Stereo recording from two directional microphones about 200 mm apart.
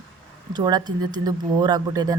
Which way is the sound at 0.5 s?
20° right (ahead or behind).